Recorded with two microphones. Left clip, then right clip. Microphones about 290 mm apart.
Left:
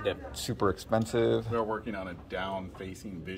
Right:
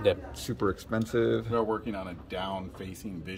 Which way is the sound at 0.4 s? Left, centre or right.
Centre.